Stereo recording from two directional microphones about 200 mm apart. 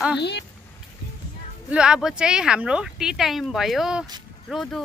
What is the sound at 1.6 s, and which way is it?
Speech, 5° right (ahead or behind).